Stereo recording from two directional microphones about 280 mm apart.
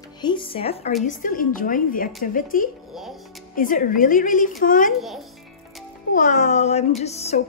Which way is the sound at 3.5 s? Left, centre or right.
Left.